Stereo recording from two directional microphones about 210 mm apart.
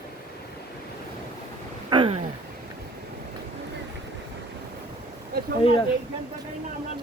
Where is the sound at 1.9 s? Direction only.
25° right (ahead or behind).